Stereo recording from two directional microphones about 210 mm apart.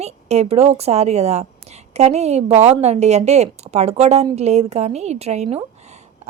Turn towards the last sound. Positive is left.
turn(degrees=-30)  # may be behind; listen again after turning